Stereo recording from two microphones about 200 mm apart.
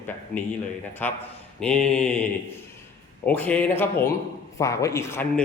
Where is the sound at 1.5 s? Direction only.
5° left (ahead or behind).